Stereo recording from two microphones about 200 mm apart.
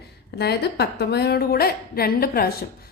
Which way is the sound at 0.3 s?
55° left (ahead or behind).